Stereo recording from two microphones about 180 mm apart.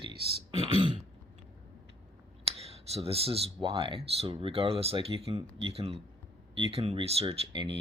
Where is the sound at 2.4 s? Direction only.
35° right (ahead or behind).